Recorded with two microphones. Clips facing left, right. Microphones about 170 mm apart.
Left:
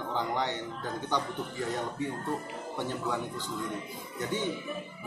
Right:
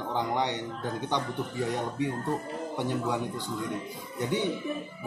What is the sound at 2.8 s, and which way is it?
Speech, 15° right (ahead or behind).